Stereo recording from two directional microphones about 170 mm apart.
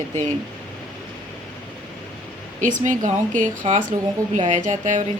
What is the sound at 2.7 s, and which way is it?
A woman's voice, 50° right (ahead or behind).